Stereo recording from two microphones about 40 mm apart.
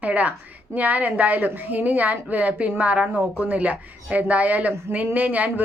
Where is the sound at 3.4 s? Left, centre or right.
Right.